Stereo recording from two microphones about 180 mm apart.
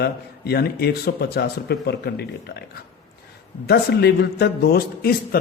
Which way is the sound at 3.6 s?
65° left (ahead or behind).